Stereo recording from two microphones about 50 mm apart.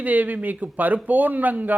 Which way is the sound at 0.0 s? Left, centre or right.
Right.